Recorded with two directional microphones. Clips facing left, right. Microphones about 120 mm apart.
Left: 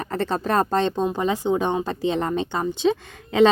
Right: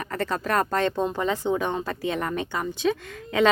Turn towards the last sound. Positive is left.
turn(degrees=25)  # may be behind; listen again after turning